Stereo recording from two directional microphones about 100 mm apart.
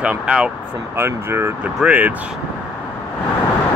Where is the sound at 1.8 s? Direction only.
10° right (ahead or behind).